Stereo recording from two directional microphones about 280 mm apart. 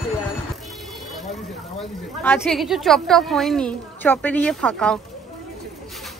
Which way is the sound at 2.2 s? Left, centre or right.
Centre.